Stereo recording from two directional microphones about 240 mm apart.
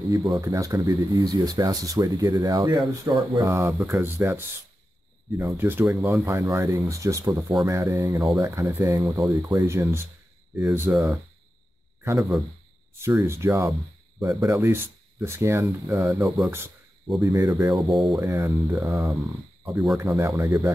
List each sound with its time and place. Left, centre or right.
0.1 s speech: centre
5.4 s speech: centre
13.0 s speech: centre
17.7 s speech: centre
18.2 s speech: centre